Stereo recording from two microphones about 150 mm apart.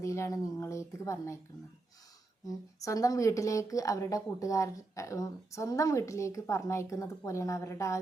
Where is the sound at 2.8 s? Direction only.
20° left (ahead or behind).